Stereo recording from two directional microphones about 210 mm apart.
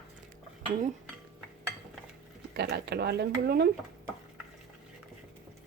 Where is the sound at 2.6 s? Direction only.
50° right (ahead or behind).